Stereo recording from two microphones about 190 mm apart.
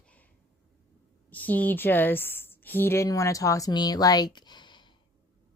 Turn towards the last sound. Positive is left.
turn(degrees=25)  # may be behind; listen again after turning